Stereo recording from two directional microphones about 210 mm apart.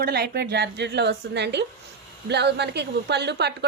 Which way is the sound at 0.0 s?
50° right (ahead or behind).